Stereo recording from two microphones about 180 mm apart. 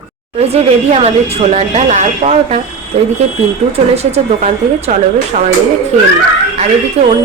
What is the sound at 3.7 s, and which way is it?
Speech, 35° right (ahead or behind).